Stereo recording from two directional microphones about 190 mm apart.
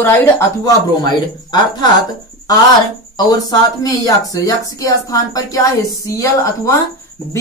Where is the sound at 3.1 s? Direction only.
20° left (ahead or behind).